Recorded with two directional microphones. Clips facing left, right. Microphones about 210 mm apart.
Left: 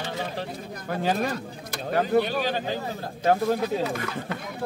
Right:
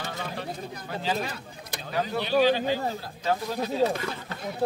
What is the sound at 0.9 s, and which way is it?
A man's voice, 50° left (ahead or behind).